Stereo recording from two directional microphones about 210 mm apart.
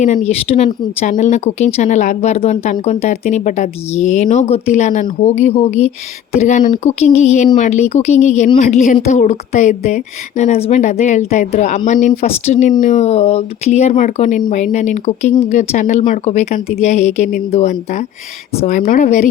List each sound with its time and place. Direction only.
0.0 s speech: 35° left (ahead or behind)